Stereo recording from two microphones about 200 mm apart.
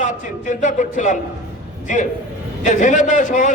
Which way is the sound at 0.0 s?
40° left (ahead or behind).